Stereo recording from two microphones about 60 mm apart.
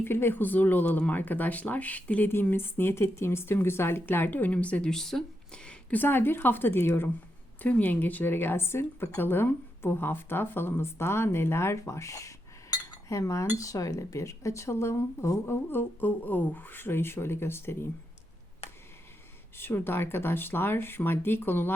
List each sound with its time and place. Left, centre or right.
0.0 s speech: left
2.3 s speech: left
4.9 s speech: centre
5.9 s speech: left
7.6 s speech: left
15.7 s speech: left
19.5 s speech: left